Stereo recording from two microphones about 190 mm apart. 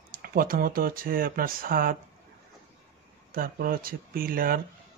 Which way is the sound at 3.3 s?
50° right (ahead or behind).